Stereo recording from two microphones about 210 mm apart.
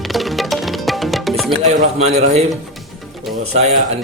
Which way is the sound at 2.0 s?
30° right (ahead or behind).